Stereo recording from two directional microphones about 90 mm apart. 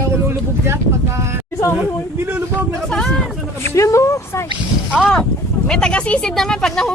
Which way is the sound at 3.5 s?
35° left (ahead or behind).